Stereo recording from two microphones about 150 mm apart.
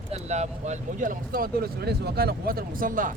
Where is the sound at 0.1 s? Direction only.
50° right (ahead or behind).